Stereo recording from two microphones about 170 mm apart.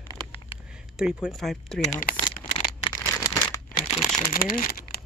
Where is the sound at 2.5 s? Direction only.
25° left (ahead or behind).